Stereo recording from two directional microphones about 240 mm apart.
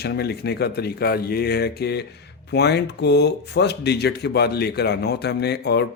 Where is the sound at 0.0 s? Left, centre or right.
Left.